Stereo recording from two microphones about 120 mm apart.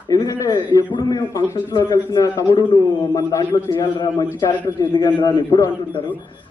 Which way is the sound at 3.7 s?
40° left (ahead or behind).